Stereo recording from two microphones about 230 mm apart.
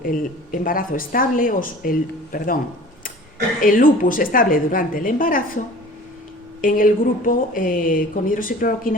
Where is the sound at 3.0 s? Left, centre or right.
Left.